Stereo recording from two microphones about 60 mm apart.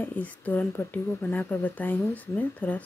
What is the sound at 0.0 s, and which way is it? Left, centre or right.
Speech, left.